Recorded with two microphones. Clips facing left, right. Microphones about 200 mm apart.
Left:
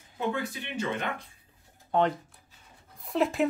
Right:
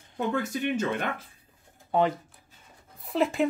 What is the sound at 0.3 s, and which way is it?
Speech, 45° right (ahead or behind).